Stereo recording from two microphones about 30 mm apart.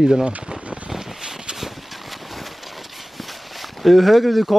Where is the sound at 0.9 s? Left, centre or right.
Right.